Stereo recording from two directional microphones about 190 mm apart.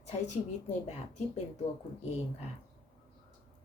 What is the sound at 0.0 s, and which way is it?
A woman's voice, 40° left (ahead or behind).